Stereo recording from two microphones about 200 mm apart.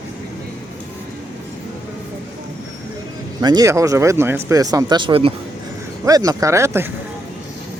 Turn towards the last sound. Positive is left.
turn(degrees=-15)  # may be behind; listen again after turning